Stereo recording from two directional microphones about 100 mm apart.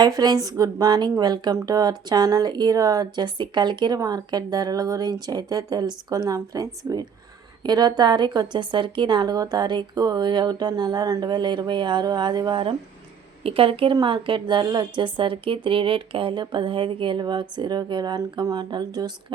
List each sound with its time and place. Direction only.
0.0 s a woman's voice: 45° right (ahead or behind)
13.4 s a woman's voice: 65° right (ahead or behind); by 18.9 s 45° right (ahead or behind)